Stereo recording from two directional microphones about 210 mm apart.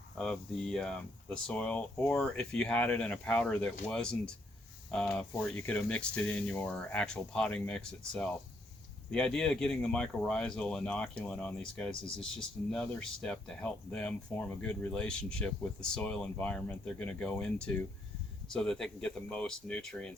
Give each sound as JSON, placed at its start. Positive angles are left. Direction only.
{"t": 0.2, "sound": "speech", "side_deg": 0}